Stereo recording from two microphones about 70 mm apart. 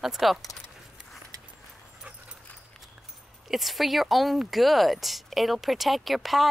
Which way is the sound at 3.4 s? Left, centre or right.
Centre.